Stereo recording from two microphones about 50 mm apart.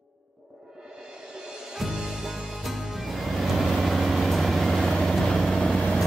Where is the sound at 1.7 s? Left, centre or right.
Centre.